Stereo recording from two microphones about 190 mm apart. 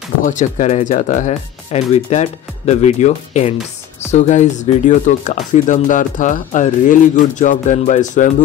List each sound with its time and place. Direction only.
0.2 s speech: 40° left (ahead or behind)